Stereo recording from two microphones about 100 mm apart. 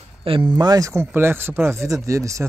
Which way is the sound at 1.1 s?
25° right (ahead or behind).